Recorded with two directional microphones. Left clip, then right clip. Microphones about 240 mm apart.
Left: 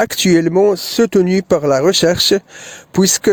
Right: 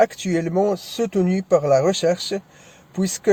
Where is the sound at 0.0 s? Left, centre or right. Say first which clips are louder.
Left 6 dB; left.